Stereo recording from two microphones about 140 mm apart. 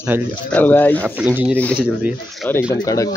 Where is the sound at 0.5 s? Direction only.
10° left (ahead or behind).